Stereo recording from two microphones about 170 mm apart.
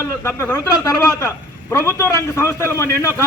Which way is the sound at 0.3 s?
15° left (ahead or behind).